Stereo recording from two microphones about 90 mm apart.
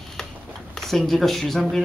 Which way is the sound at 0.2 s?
5° left (ahead or behind).